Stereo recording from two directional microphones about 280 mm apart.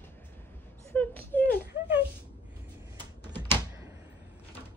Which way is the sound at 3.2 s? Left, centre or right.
Centre.